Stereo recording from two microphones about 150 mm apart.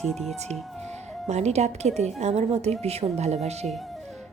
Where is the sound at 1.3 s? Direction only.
45° right (ahead or behind).